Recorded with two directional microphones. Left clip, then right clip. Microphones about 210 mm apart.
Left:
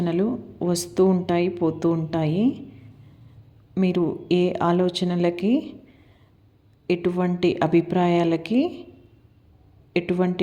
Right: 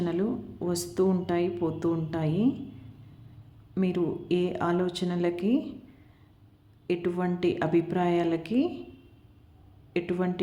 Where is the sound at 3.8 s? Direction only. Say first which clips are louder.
Left 5 dB; 25° left (ahead or behind).